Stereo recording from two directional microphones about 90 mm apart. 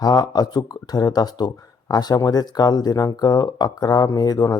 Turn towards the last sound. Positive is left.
turn(degrees=45)  # may be behind; listen again after turning